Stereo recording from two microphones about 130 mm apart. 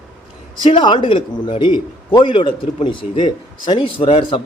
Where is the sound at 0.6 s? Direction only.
40° left (ahead or behind).